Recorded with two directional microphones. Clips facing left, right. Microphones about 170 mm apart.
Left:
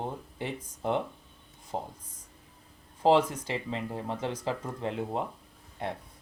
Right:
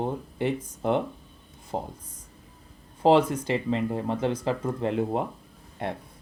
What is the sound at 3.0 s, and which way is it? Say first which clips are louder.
Speech: right 4 dB; 65° right (ahead or behind).